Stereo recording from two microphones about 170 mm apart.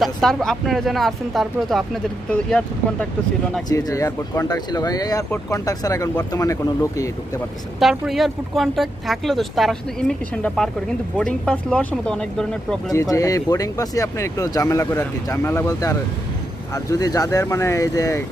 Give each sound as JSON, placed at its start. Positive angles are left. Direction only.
{"t": 0.0, "sound": "speech", "side_deg": 0}
{"t": 3.6, "sound": "speech", "side_deg": 20}
{"t": 7.8, "sound": "speech", "side_deg": 0}
{"t": 12.9, "sound": "speech", "side_deg": 20}